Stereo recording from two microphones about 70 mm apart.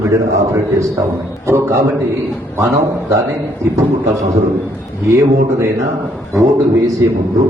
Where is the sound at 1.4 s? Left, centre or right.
Right.